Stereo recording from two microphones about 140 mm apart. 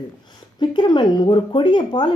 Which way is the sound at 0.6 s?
30° left (ahead or behind).